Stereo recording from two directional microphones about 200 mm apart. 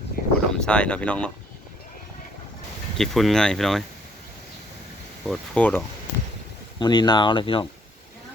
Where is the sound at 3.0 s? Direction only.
Centre (ahead or behind).